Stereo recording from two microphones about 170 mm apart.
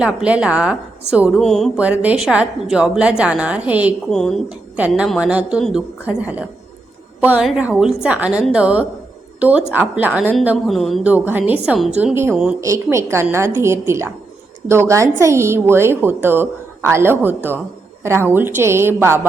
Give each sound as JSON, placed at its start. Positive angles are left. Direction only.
{"t": 0.0, "sound": "a woman's voice", "side_deg": -5}
{"t": 1.7, "sound": "a woman's voice", "side_deg": -10}
{"t": 4.1, "sound": "a woman's voice", "side_deg": 5}